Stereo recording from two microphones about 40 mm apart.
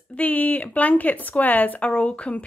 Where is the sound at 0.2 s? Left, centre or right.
Left.